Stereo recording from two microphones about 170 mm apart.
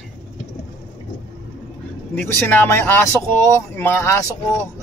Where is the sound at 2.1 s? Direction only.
10° left (ahead or behind).